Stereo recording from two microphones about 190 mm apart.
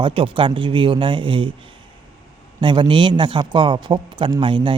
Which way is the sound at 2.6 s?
25° right (ahead or behind).